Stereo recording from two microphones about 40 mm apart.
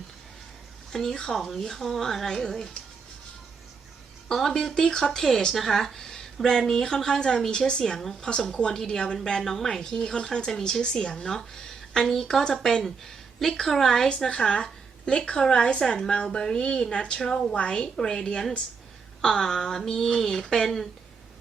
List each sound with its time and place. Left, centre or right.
0.9 s a woman's voice: centre
1.3 s a woman's voice: centre
4.3 s a woman's voice: centre
14.3 s a woman's voice: left
17.2 s a woman's voice: centre
17.5 s a woman's voice: left